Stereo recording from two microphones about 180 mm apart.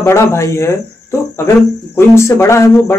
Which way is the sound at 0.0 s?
15° left (ahead or behind).